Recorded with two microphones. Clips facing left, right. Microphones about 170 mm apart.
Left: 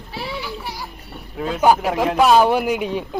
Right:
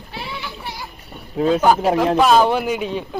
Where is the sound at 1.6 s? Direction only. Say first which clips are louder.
Left 4 dB; 10° left (ahead or behind).